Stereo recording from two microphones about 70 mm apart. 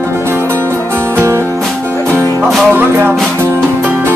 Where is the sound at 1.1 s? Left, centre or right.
Right.